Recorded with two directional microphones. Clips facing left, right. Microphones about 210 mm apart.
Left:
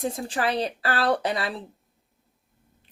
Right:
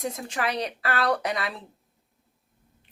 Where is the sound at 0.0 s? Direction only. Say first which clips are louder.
Left 3 dB; 30° left (ahead or behind).